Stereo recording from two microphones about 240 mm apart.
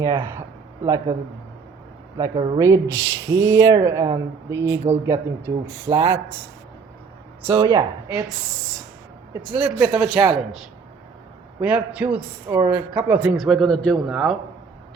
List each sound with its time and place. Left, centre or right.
0.0 s speech: centre
2.1 s speech: centre
7.4 s speech: centre
9.3 s a man's voice: centre